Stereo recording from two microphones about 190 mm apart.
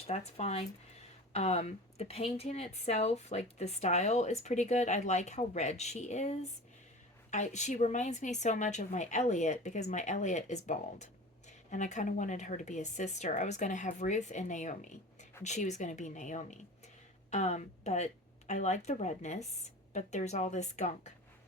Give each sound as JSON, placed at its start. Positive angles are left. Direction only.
{"t": 0.3, "sound": "a woman's voice", "side_deg": 35}